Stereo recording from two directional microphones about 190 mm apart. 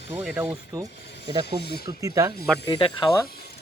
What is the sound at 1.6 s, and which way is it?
Speech, 55° left (ahead or behind).